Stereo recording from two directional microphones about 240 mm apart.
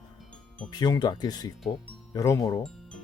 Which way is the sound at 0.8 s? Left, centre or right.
Centre.